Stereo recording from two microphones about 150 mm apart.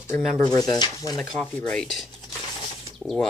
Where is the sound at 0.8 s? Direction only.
25° left (ahead or behind).